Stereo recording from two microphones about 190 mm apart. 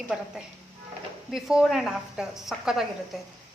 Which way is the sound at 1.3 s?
Centre (ahead or behind).